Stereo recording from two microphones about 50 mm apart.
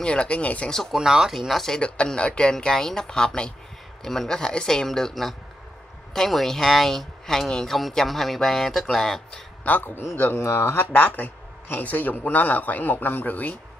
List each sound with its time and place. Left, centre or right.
0.0 s speech: centre
0.9 s speech: centre
1.5 s speech: centre
1.8 s speech: left
9.7 s speech: left
10.3 s speech: left
10.9 s speech: left